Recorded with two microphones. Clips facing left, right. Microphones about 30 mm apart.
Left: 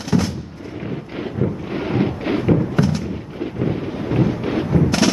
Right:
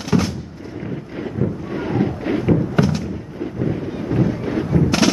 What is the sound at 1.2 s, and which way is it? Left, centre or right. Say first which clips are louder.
Wind noise: even; left.